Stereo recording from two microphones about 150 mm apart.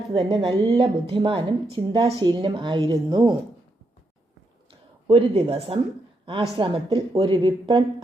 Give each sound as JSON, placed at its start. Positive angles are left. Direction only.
{"t": 0.1, "sound": "a woman's voice", "side_deg": -35}
{"t": 5.0, "sound": "a woman's voice", "side_deg": -35}